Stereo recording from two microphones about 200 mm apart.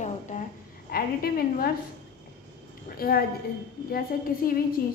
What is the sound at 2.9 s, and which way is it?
A woman's voice, 50° left (ahead or behind).